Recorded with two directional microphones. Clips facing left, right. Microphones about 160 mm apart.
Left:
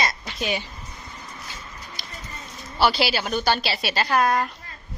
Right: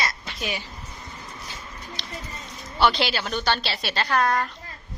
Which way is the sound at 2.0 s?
10° left (ahead or behind).